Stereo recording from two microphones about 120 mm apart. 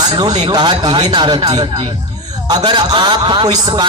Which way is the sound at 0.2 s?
35° right (ahead or behind).